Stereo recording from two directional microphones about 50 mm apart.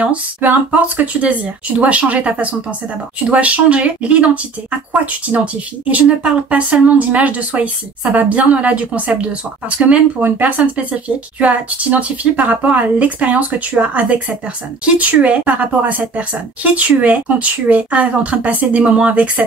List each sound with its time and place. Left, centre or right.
0.0 s speech: right